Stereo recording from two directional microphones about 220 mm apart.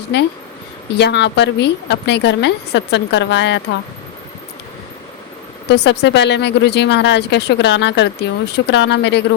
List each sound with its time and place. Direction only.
0.1 s a woman's voice: 50° left (ahead or behind)
5.6 s a woman's voice: 50° left (ahead or behind)